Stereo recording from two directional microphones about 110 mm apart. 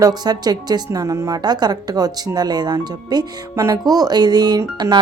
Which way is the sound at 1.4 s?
40° right (ahead or behind).